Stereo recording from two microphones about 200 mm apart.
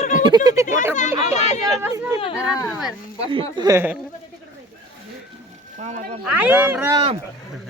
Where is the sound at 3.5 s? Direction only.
20° right (ahead or behind).